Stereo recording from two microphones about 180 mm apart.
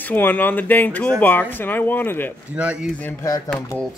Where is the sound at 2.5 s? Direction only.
5° right (ahead or behind).